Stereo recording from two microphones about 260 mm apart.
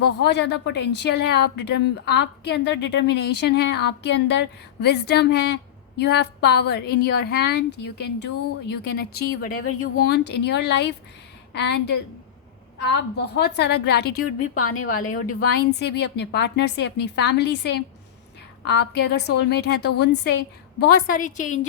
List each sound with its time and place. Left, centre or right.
0.0 s a woman's voice: left
13.3 s a woman's voice: left
14.3 s a woman's voice: left
14.8 s a woman's voice: left